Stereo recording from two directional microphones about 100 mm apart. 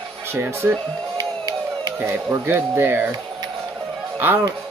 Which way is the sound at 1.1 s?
40° right (ahead or behind).